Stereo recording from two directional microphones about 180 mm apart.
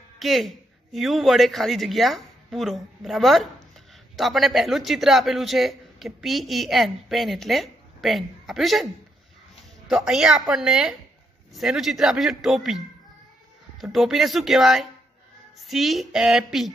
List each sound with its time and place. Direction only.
0.2 s a man's voice: centre (ahead or behind)